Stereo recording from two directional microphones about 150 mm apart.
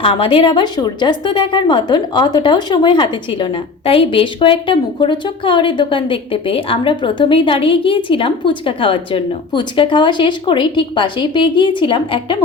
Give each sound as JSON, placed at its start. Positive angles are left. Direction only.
{"t": 0.0, "sound": "a woman's voice", "side_deg": 35}